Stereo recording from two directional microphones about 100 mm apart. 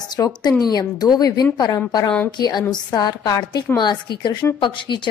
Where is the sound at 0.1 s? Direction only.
40° left (ahead or behind).